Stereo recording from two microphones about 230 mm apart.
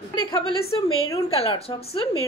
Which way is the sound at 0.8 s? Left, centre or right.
Left.